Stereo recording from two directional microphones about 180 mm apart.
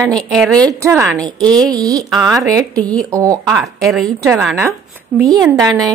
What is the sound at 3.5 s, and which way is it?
Speech, centre (ahead or behind).